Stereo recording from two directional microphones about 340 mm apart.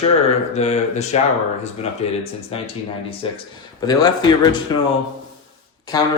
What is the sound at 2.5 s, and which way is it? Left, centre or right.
A man's voice, centre.